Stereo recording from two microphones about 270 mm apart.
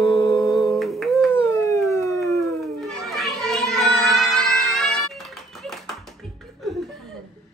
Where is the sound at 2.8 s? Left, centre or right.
Centre.